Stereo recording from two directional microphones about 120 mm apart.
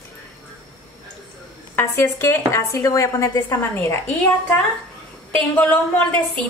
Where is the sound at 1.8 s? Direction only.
20° left (ahead or behind).